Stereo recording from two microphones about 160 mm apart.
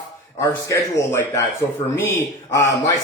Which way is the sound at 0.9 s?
20° left (ahead or behind).